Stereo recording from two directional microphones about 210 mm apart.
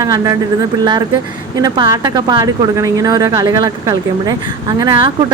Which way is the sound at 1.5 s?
20° right (ahead or behind).